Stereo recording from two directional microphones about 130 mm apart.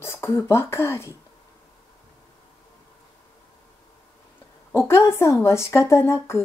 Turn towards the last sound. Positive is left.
turn(degrees=20)  # may be behind; listen again after turning